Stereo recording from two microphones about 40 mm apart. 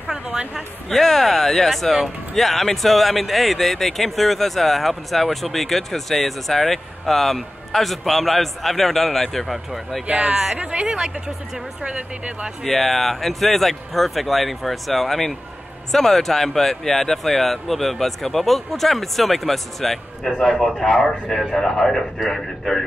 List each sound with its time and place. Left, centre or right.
0.1 s a sound: right
0.8 s speech: centre
10.0 s speech: right
12.6 s speech: centre